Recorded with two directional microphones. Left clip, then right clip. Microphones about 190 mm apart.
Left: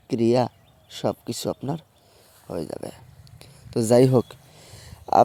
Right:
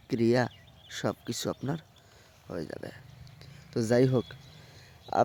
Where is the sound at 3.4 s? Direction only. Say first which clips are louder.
Left 7 dB; 25° left (ahead or behind).